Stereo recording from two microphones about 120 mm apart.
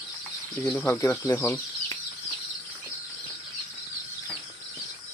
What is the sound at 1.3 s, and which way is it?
Speech, 15° left (ahead or behind).